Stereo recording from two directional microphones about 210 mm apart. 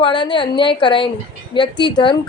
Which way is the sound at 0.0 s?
20° left (ahead or behind).